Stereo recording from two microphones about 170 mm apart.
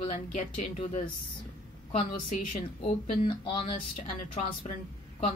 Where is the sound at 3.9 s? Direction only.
45° left (ahead or behind).